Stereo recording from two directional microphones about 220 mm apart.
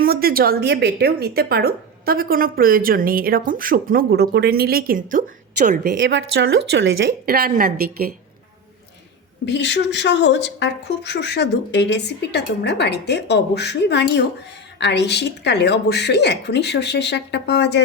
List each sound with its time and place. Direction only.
0.0 s speech: 45° right (ahead or behind)
6.0 s speech: 55° right (ahead or behind)
9.5 s a woman's voice: 50° left (ahead or behind)